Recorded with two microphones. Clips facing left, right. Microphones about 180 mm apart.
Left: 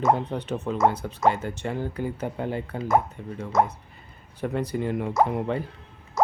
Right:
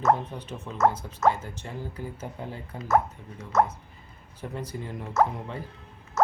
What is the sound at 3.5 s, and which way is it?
Speech, 10° left (ahead or behind).